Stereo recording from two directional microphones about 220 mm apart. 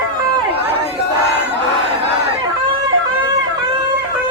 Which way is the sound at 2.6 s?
20° right (ahead or behind).